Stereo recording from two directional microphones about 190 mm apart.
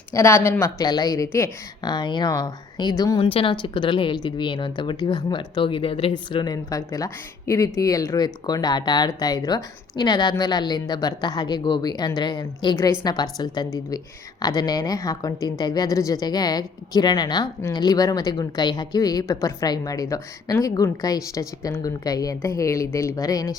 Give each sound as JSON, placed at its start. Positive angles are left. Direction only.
{"t": 0.1, "sound": "speech", "side_deg": 15}